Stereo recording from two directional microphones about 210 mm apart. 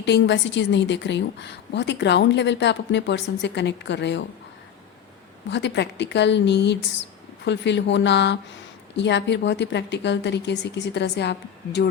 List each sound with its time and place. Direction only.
0.0 s a woman's voice: 55° left (ahead or behind)
5.5 s a woman's voice: 55° left (ahead or behind)